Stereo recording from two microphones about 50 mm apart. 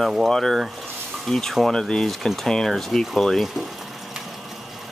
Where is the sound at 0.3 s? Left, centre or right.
Centre.